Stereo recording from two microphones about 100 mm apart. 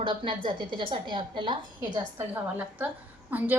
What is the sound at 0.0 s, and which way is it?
A woman's voice, 55° right (ahead or behind).